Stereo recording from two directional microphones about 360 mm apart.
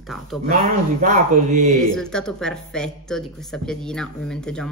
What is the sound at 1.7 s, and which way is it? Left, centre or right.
Speech, centre.